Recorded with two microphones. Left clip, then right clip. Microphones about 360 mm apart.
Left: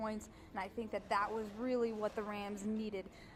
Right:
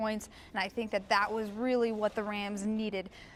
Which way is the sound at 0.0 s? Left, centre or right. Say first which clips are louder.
Right 8 dB; right.